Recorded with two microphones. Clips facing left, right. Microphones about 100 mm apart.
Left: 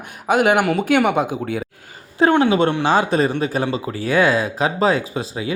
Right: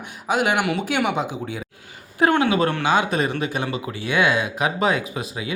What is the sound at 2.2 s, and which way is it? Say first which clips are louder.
A man's voice: left 3 dB; 30° left (ahead or behind).